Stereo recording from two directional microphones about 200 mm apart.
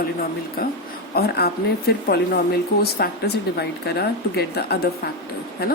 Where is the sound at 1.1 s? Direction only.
50° left (ahead or behind).